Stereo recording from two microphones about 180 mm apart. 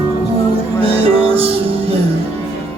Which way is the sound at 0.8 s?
30° right (ahead or behind).